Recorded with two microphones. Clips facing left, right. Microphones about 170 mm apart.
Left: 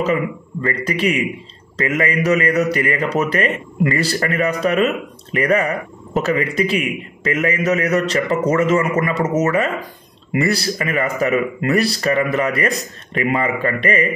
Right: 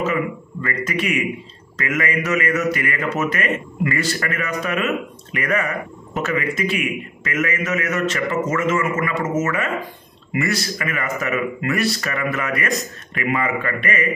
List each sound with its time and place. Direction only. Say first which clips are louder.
0.0 s a man's voice: left 3 dB; 30° left (ahead or behind)